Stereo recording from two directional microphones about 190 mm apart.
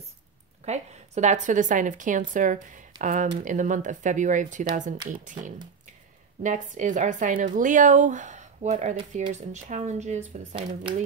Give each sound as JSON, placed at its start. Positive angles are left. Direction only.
{"t": 0.7, "sound": "speech", "side_deg": -40}